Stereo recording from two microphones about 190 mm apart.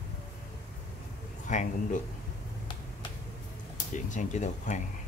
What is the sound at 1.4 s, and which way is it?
Speech, 40° left (ahead or behind).